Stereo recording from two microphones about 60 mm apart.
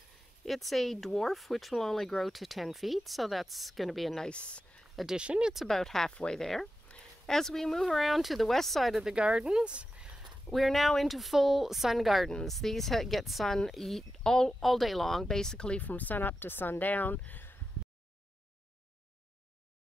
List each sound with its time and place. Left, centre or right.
0.5 s speech: centre
4.3 s speech: centre
5.1 s speech: centre
5.5 s speech: centre
5.8 s speech: centre
6.9 s a sound: centre
7.2 s speech: centre
9.0 s speech: centre
10.5 s speech: centre
15.8 s speech: left